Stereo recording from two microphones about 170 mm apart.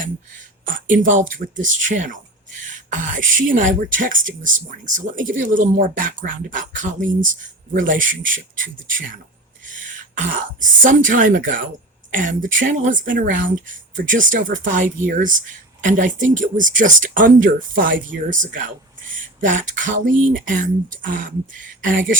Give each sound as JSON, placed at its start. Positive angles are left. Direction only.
{"t": 0.6, "sound": "speech", "side_deg": -55}